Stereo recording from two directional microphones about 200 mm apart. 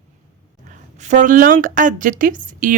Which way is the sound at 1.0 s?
40° right (ahead or behind).